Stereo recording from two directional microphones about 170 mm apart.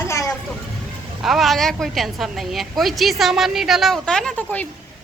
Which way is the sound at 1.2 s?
Centre (ahead or behind).